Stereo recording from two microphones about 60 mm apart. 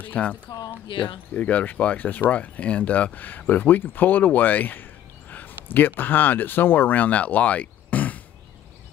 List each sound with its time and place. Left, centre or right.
0.0 s speech: left